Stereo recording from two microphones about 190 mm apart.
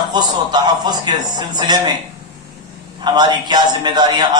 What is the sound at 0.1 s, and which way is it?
A man's voice, 20° right (ahead or behind).